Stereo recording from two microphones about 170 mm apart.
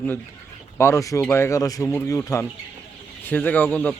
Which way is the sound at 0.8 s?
15° left (ahead or behind).